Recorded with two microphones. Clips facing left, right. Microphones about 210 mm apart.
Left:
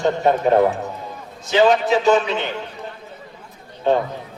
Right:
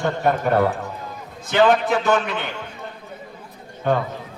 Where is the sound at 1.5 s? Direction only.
55° right (ahead or behind).